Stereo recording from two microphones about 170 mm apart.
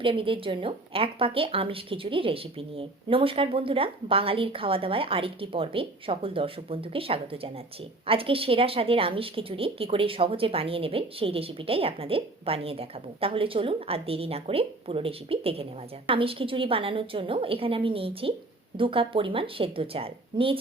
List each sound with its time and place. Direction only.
0.0 s a woman's voice: 30° right (ahead or behind)